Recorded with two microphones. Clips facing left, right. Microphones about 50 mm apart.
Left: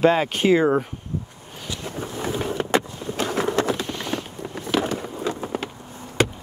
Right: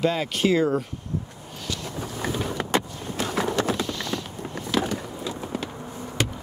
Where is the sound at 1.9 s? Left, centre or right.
Left.